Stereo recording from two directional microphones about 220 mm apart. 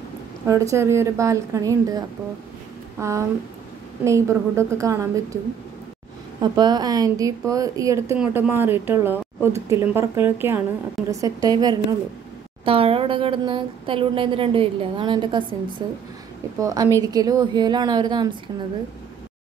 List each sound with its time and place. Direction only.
0.5 s a woman's voice: 15° right (ahead or behind)
6.4 s a woman's voice: 20° right (ahead or behind)